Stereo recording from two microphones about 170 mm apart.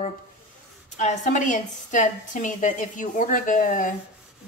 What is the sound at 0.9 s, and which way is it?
A woman's voice, 45° left (ahead or behind).